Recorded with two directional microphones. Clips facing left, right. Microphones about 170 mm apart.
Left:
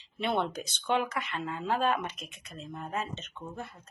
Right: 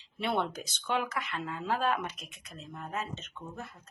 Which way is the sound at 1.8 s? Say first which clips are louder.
Left 2 dB; 5° right (ahead or behind).